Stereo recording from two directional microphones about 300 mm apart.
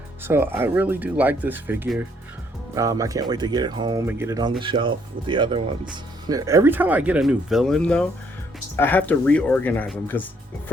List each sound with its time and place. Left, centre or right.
0.3 s speech: centre